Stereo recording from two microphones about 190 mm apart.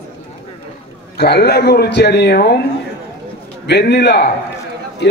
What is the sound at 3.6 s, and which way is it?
Speech, 60° left (ahead or behind).